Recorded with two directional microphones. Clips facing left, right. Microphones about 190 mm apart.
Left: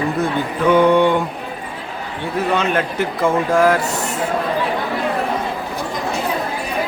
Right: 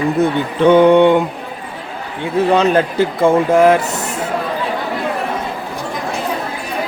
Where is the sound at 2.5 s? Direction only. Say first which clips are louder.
Right 6 dB; 35° right (ahead or behind).